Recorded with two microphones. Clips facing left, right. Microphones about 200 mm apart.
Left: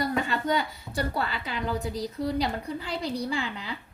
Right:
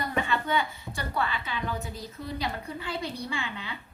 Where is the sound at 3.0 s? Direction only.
35° left (ahead or behind).